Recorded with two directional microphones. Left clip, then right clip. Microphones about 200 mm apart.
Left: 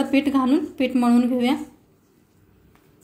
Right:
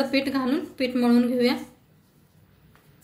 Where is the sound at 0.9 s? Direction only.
35° left (ahead or behind).